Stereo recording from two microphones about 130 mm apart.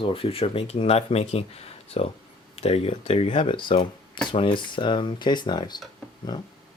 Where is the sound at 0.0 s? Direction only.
45° left (ahead or behind).